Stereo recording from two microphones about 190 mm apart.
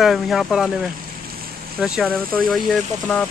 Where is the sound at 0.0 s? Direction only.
Centre (ahead or behind).